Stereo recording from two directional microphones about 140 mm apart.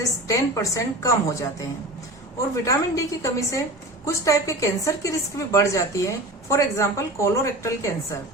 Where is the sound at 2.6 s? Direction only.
20° left (ahead or behind).